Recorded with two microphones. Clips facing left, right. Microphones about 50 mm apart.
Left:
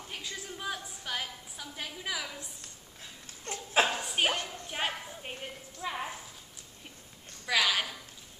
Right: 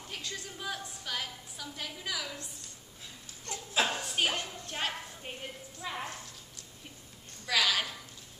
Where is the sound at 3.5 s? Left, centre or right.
Left.